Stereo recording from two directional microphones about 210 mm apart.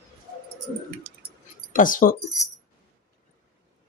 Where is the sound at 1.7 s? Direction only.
40° left (ahead or behind).